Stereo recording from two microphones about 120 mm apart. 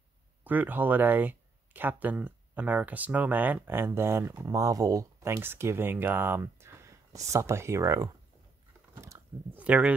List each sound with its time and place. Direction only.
0.4 s speech: 15° right (ahead or behind)
8.9 s a sound: 25° right (ahead or behind)
9.6 s speech: 10° right (ahead or behind)